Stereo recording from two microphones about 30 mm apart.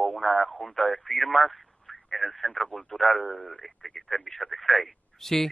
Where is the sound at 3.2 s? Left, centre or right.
Left.